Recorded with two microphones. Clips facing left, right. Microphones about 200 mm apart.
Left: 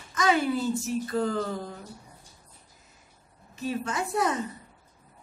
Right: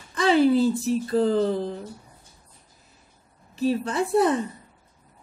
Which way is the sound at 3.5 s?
35° right (ahead or behind).